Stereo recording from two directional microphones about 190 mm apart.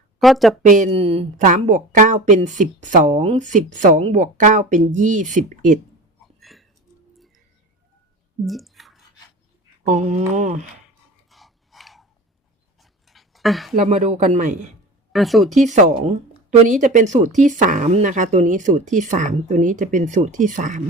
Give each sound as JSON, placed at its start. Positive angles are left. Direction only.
{"t": 0.2, "sound": "a woman's voice", "side_deg": 0}
{"t": 0.6, "sound": "speech", "side_deg": -40}
{"t": 6.4, "sound": "music", "side_deg": 0}
{"t": 8.4, "sound": "squish", "side_deg": 0}
{"t": 9.8, "sound": "speech", "side_deg": -35}
{"t": 11.3, "sound": "chewing", "side_deg": 0}
{"t": 12.8, "sound": "a sound", "side_deg": 0}
{"t": 13.7, "sound": "speech", "side_deg": -35}
{"t": 15.1, "sound": "a woman's voice", "side_deg": 0}
{"t": 15.5, "sound": "speech", "side_deg": -40}